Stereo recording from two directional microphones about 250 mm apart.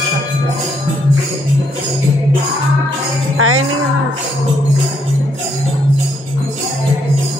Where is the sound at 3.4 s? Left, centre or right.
Right.